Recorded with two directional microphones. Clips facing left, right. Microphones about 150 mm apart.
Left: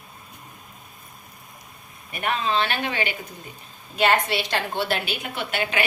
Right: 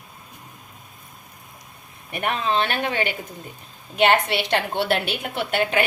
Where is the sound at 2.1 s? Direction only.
55° right (ahead or behind).